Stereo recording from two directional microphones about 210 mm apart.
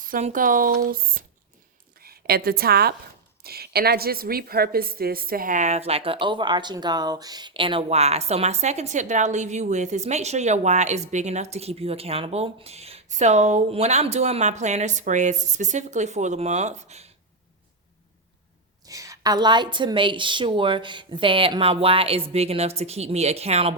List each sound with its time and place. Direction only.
0.0 s a woman's voice: 35° right (ahead or behind)
18.9 s a woman's voice: 15° right (ahead or behind)